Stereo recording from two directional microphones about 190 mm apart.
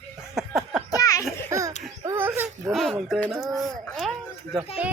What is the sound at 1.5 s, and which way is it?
Baby laughter, 15° right (ahead or behind).